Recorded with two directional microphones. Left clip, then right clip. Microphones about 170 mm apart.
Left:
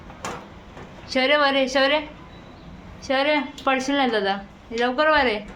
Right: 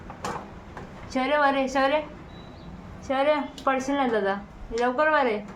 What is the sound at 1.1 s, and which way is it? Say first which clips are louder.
Speech: left 4 dB; 10° left (ahead or behind).